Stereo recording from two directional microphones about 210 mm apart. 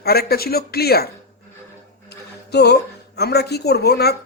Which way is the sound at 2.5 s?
50° left (ahead or behind).